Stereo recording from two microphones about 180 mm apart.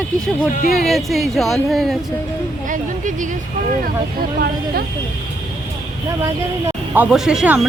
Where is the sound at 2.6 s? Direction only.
45° right (ahead or behind).